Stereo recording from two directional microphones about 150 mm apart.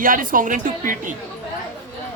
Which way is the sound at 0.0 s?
65° right (ahead or behind).